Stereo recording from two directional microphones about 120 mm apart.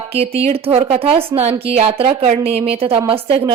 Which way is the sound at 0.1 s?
55° right (ahead or behind).